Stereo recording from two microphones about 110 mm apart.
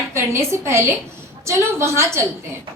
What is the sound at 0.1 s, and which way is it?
A woman's voice, 25° right (ahead or behind).